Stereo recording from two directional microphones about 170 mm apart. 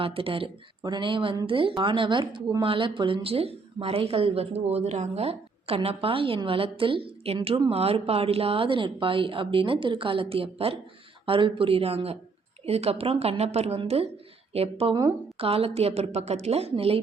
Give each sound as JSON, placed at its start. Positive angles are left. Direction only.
{"t": 0.0, "sound": "speech", "side_deg": -35}